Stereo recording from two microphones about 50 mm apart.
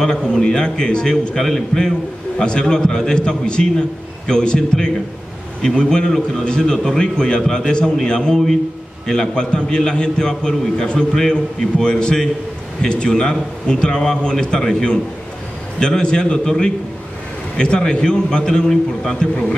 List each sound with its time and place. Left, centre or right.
0.0 s a man's voice: centre